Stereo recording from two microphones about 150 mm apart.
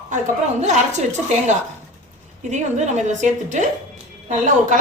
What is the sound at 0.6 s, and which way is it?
Speech, 50° right (ahead or behind).